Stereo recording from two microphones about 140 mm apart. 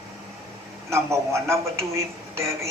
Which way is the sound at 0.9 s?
20° right (ahead or behind).